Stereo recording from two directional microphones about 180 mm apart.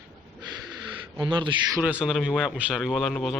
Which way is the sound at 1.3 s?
25° right (ahead or behind).